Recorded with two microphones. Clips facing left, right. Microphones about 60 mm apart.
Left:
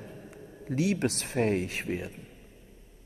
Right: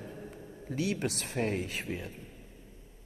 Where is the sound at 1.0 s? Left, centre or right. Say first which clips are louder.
Left 5 dB; left.